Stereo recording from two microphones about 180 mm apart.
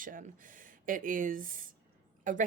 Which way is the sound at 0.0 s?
50° right (ahead or behind).